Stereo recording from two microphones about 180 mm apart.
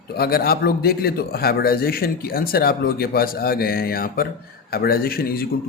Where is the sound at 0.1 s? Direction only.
60° left (ahead or behind).